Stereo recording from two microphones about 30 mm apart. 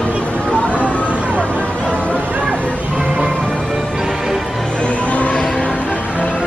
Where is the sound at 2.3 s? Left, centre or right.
Right.